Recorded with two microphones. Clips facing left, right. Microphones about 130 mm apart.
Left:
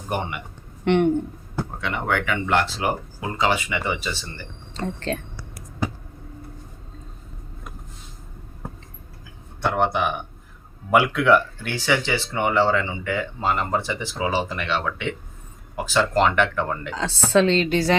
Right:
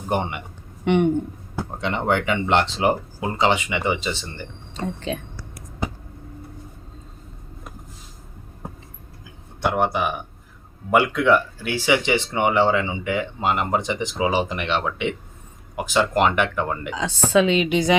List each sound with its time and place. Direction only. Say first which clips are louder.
0.1 s speech: right 3 dB; 25° right (ahead or behind)
1.8 s speech: right 4 dB; 25° right (ahead or behind)
4.9 s speech: even; 5° right (ahead or behind)
9.6 s speech: even; 10° right (ahead or behind)